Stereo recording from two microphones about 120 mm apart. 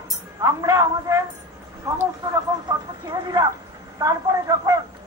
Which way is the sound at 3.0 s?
35° right (ahead or behind).